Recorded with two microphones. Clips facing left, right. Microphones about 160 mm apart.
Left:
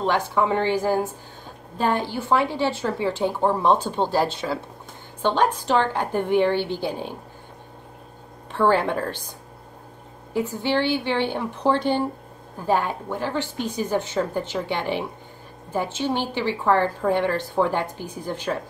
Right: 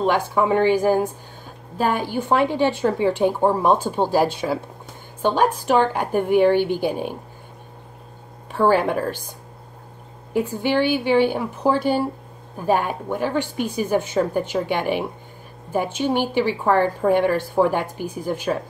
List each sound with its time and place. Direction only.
0.0 s a woman's voice: 15° right (ahead or behind)
8.5 s a woman's voice: 10° right (ahead or behind)
10.3 s a woman's voice: 15° right (ahead or behind)